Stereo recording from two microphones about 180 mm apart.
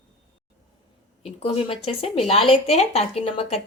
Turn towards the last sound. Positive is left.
turn(degrees=35)  # may be behind; listen again after turning